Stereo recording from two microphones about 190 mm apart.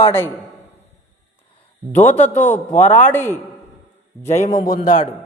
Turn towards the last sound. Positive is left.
turn(degrees=45)  # may be behind; listen again after turning